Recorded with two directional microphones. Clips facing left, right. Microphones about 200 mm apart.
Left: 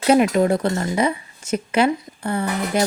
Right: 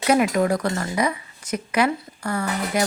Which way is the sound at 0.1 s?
25° left (ahead or behind).